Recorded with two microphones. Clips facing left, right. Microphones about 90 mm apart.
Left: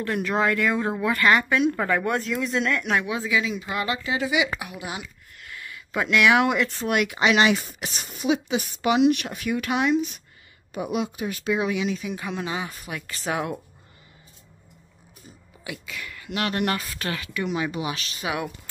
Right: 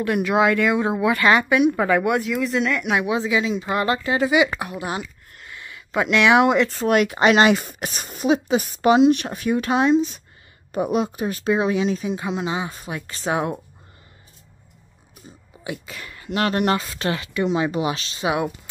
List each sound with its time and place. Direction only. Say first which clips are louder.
0.0 s speech: right 5 dB; 15° right (ahead or behind)
3.0 s speech: right 4 dB; 20° right (ahead or behind)
3.6 s speech: right 6 dB; 40° right (ahead or behind)
5.5 s speech: right 3 dB; 25° right (ahead or behind)
15.6 s speech: right 4 dB; 30° right (ahead or behind)